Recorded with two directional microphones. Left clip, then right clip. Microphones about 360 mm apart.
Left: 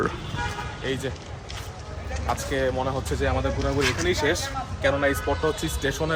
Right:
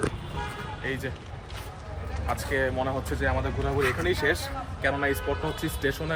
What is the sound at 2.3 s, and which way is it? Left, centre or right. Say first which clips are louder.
Speech: left 1 dB; centre.